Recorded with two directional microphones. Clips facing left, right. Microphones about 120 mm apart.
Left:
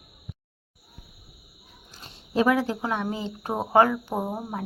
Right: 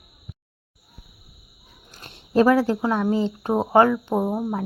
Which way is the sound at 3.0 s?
35° right (ahead or behind).